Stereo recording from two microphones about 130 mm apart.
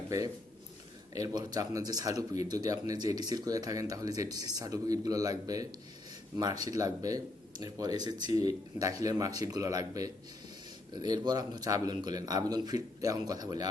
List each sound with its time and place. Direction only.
1.1 s speech: 30° right (ahead or behind)